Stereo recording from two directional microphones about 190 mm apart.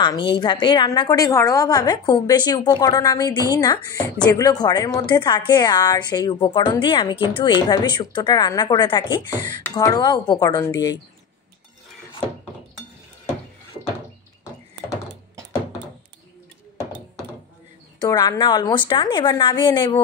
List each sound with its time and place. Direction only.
0.0 s a woman's voice: 25° left (ahead or behind)
9.3 s speech: 40° right (ahead or behind)
9.6 s a woman's voice: 15° left (ahead or behind)
18.0 s a woman's voice: 20° left (ahead or behind)